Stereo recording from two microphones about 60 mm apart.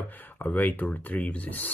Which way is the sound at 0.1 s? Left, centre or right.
Left.